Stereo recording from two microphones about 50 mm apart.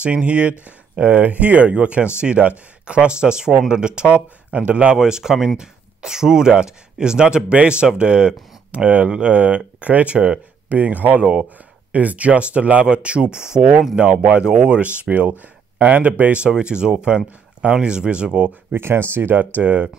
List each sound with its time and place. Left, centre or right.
0.0 s speech: right
4.9 s speech: centre
18.5 s speech: right